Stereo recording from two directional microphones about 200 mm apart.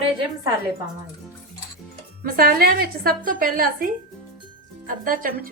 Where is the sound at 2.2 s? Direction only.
50° right (ahead or behind).